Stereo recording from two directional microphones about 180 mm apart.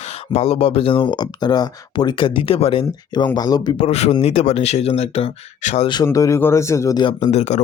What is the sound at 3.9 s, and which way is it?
Speech, 35° left (ahead or behind).